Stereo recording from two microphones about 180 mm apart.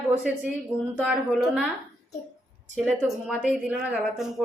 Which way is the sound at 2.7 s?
Centre (ahead or behind).